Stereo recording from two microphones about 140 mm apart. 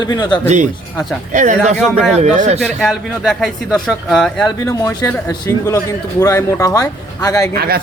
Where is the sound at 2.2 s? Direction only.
50° right (ahead or behind).